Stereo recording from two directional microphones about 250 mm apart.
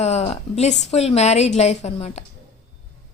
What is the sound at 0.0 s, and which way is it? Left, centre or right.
A woman's voice, left.